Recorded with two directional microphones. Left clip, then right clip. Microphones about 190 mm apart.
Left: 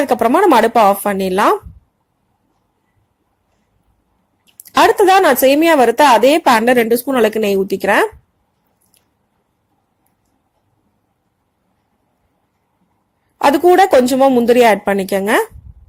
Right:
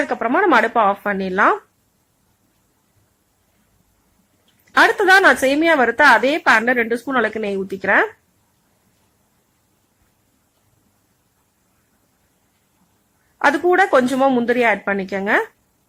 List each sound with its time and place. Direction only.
0.0 s speech: 25° left (ahead or behind)
4.7 s speech: 25° left (ahead or behind)
13.4 s speech: 25° left (ahead or behind)
14.5 s a woman's voice: 30° left (ahead or behind)